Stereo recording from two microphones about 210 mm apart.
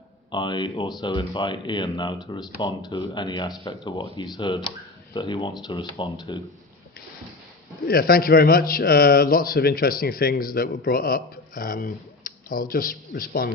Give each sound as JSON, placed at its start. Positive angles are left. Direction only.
{"t": 0.3, "sound": "speech", "side_deg": 20}
{"t": 7.9, "sound": "a man's voice", "side_deg": 45}